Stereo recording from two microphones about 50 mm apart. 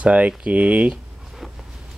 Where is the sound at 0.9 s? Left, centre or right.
Centre.